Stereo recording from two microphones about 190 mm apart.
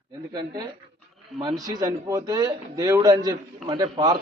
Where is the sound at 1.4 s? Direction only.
20° right (ahead or behind).